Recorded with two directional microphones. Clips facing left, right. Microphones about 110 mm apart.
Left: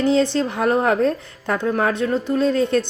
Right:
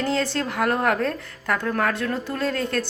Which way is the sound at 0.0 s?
25° left (ahead or behind).